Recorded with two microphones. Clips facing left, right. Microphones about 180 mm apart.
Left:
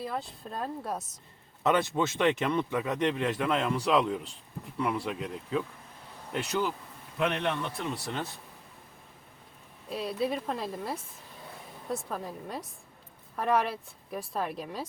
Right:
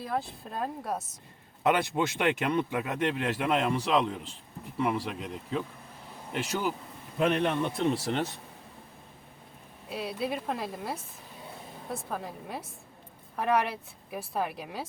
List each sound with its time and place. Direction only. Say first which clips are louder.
0.0 s a woman's voice: right 2 dB; centre (ahead or behind)
1.6 s a woman's voice: even; 15° right (ahead or behind)
7.3 s a man's voice: right 4 dB; 40° right (ahead or behind)
7.6 s speech: right 7 dB; 30° right (ahead or behind)
9.9 s a woman's voice: left 2 dB; centre (ahead or behind)